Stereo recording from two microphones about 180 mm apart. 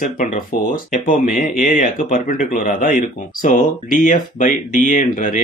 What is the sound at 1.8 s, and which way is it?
Speech, 50° left (ahead or behind).